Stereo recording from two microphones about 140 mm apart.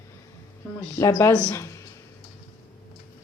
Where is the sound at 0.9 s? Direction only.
20° left (ahead or behind).